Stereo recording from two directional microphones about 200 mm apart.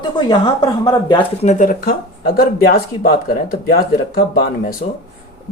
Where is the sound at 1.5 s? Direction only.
40° left (ahead or behind).